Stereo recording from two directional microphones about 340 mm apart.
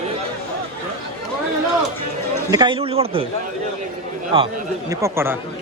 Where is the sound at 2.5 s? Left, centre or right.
Centre.